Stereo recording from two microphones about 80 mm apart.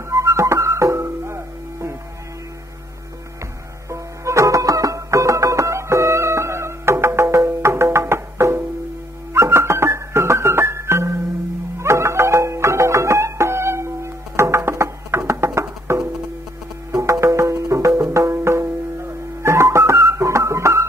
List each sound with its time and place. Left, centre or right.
0.1 s music: right
3.9 s music: right